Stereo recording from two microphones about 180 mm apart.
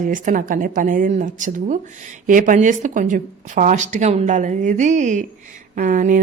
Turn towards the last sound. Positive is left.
turn(degrees=-45)  # may be behind; listen again after turning